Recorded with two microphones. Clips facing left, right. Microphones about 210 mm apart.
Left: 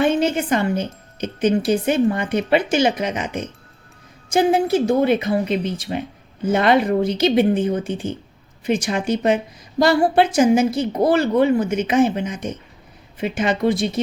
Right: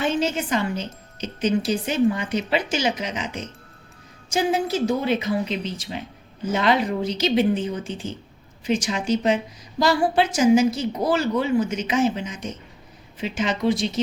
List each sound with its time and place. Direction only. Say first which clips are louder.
0.0 s a woman's voice: left 5 dB; 55° left (ahead or behind)